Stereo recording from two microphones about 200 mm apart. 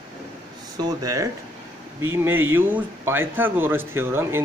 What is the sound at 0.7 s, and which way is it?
A man's voice, 20° right (ahead or behind).